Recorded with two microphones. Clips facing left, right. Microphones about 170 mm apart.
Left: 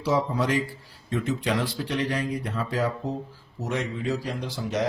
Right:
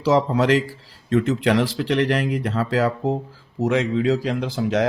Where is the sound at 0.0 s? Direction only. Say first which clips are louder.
Right 6 dB; 90° right.